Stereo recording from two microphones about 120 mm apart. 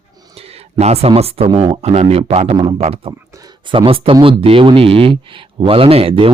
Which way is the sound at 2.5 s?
45° right (ahead or behind).